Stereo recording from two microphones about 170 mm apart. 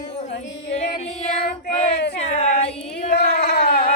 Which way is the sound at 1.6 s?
45° left (ahead or behind).